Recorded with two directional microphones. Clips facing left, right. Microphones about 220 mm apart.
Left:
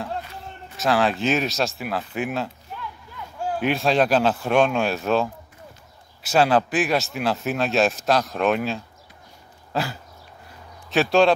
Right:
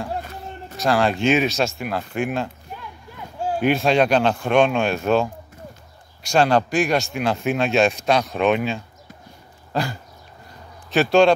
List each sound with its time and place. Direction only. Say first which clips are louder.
0.2 s a sound: right 4 dB; 45° right (ahead or behind)
0.7 s speech: right 1 dB; centre (ahead or behind)
3.5 s speech: right 3 dB; centre (ahead or behind)
9.7 s dog: right 2 dB; 5° left (ahead or behind)
10.9 s speech: right 2 dB; centre (ahead or behind)